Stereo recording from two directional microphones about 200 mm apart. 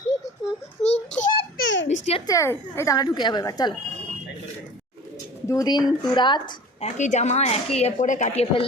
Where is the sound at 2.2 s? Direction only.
15° left (ahead or behind).